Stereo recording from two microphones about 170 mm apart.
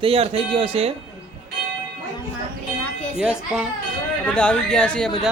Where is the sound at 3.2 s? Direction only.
5° right (ahead or behind).